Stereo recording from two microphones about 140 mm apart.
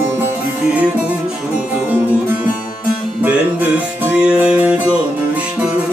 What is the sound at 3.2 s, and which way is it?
Music, 10° right (ahead or behind).